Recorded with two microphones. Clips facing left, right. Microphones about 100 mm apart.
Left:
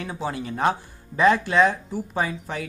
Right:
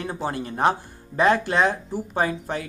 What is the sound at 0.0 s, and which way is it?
A man's voice, 45° right (ahead or behind).